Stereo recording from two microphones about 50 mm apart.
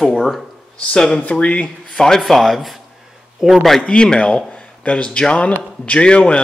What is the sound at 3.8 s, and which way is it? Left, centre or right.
A man's voice, centre.